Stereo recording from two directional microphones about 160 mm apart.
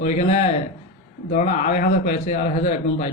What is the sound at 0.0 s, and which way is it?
Speech, 45° left (ahead or behind).